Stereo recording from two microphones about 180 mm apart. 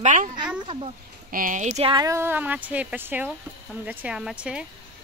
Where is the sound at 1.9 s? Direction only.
15° right (ahead or behind).